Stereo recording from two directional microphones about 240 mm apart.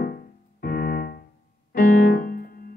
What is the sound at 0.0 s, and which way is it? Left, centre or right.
Keyboard, left.